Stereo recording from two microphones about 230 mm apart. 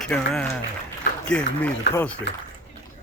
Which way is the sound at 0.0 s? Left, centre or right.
Centre.